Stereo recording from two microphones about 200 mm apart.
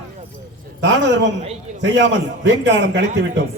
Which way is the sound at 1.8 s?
65° right (ahead or behind).